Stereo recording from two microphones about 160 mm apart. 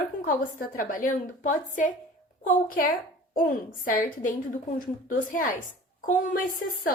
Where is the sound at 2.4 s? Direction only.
65° left (ahead or behind).